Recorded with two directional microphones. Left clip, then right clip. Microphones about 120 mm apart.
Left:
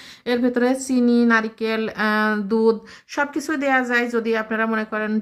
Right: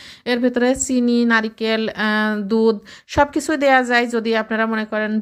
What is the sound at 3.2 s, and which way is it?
A woman's voice, 35° right (ahead or behind).